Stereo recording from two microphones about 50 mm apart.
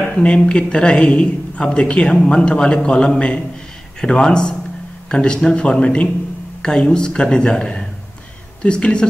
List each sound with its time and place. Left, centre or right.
0.2 s a man's voice: left